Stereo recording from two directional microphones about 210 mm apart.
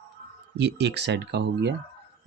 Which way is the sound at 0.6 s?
55° right (ahead or behind).